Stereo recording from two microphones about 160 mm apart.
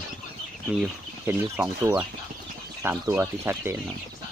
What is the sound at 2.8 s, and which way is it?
Speech, 20° right (ahead or behind).